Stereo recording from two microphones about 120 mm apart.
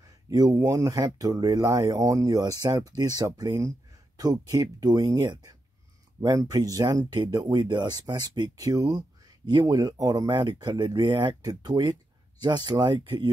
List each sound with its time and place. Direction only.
0.0 s speech: 30° right (ahead or behind)